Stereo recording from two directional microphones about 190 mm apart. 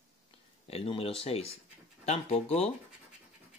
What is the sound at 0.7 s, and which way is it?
Speech, 30° left (ahead or behind).